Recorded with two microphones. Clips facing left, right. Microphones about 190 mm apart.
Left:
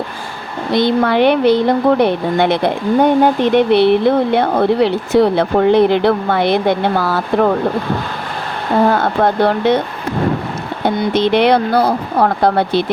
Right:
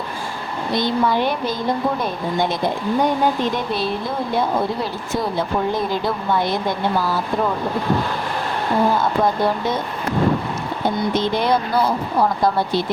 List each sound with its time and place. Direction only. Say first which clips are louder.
0.7 s a woman's voice: left 6 dB; 70° left (ahead or behind)
8.9 s a woman's voice: left 4 dB; 70° left (ahead or behind)
10.8 s a woman's voice: left 6 dB; 70° left (ahead or behind)